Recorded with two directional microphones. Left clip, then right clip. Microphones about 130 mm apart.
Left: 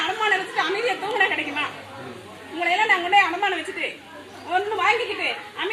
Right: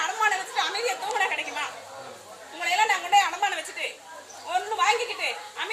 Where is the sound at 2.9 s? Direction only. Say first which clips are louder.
Left 4 dB; 25° right (ahead or behind).